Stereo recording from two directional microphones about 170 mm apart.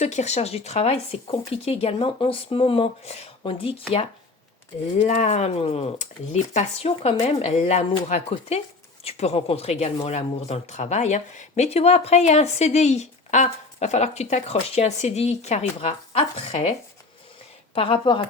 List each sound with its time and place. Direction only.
0.0 s speech: 40° left (ahead or behind)
4.9 s speech: 45° left (ahead or behind)
17.7 s speech: 35° left (ahead or behind)